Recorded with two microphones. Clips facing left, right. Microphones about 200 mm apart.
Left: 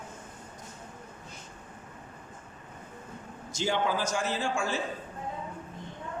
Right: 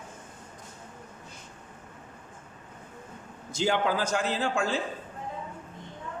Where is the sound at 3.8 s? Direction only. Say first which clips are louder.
Right 2 dB; 60° right (ahead or behind).